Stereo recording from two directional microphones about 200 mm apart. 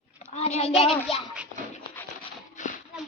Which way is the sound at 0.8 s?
30° left (ahead or behind).